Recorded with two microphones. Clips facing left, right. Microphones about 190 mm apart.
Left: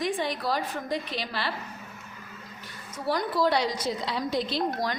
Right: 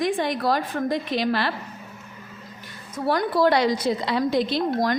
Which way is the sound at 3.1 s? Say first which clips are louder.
Right 5 dB; 60° right (ahead or behind).